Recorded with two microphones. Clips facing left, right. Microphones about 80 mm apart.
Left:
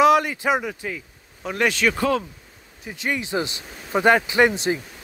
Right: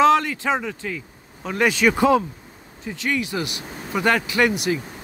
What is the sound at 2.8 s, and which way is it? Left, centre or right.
Speech, centre.